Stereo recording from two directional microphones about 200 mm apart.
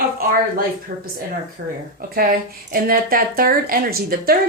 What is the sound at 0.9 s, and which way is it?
Speech, 40° right (ahead or behind).